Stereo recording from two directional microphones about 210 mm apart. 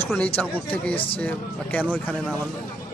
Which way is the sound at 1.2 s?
5° left (ahead or behind).